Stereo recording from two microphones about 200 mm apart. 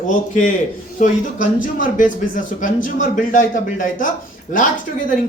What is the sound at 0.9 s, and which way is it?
Speech, 40° left (ahead or behind).